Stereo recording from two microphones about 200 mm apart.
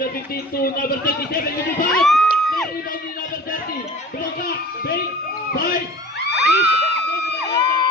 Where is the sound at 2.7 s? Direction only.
45° left (ahead or behind).